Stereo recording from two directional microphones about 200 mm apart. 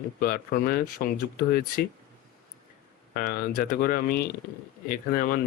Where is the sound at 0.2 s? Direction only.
45° left (ahead or behind).